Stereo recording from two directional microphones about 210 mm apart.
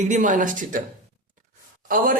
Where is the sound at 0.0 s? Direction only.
35° right (ahead or behind).